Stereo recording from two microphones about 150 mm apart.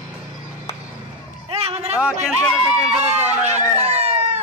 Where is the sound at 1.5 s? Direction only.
40° right (ahead or behind).